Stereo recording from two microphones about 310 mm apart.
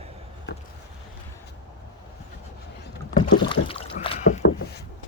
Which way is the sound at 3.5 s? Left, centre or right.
Centre.